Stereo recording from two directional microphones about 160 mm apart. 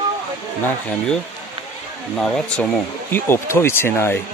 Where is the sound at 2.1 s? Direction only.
5° left (ahead or behind).